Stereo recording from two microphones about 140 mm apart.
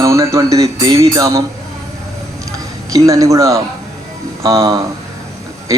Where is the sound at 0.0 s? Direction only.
20° right (ahead or behind).